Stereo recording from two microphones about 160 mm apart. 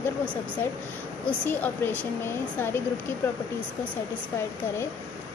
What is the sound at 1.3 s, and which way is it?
Speech, 10° left (ahead or behind).